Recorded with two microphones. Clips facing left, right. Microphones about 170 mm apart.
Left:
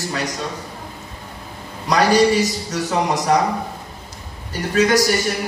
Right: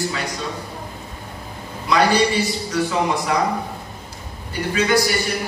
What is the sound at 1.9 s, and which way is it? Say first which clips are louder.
A man's voice: left 2 dB; 40° left (ahead or behind).